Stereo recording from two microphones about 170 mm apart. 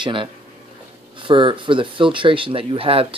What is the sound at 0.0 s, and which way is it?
Speech, 30° right (ahead or behind).